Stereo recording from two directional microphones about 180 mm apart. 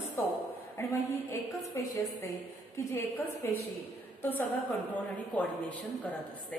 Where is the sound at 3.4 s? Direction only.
15° left (ahead or behind).